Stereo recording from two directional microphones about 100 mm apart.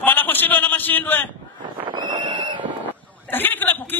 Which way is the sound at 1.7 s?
50° right (ahead or behind).